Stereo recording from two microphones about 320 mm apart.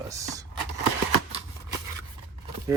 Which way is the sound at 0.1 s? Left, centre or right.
Centre.